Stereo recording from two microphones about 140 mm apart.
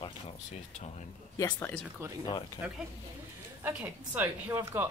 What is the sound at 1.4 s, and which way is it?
Speech, 20° left (ahead or behind).